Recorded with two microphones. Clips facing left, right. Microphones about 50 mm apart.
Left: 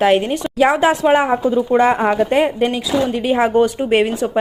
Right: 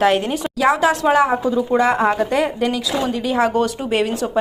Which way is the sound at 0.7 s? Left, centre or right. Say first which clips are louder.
Even; left.